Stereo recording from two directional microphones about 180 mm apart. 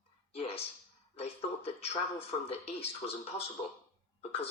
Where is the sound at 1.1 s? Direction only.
35° left (ahead or behind).